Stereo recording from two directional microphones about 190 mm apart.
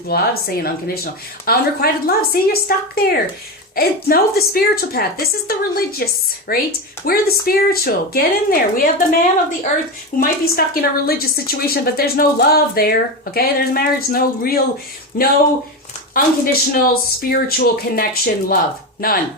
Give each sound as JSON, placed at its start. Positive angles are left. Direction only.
{"t": 0.1, "sound": "a woman's voice", "side_deg": 55}
{"t": 10.2, "sound": "a woman's voice", "side_deg": 50}